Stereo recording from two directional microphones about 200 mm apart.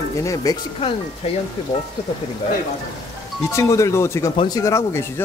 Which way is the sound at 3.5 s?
15° left (ahead or behind).